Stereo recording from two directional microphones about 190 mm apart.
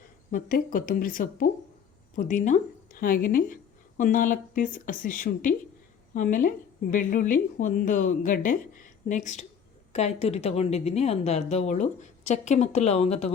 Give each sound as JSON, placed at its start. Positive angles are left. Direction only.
{"t": 0.3, "sound": "a woman's voice", "side_deg": 45}